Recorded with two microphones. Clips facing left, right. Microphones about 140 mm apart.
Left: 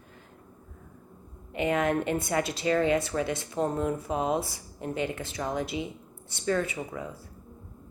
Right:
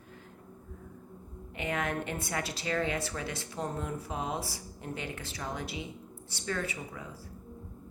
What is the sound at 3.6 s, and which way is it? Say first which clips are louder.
Speech: left 8 dB; 45° left (ahead or behind).